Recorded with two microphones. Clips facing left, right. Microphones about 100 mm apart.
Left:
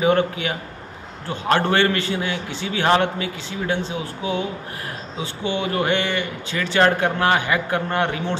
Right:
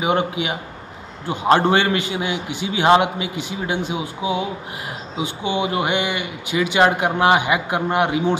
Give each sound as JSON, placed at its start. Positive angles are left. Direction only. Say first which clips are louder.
{"t": 0.0, "sound": "speech", "louder": "left 1 dB", "side_deg": -15}